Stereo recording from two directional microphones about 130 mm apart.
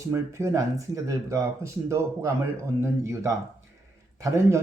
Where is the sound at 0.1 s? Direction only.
20° right (ahead or behind).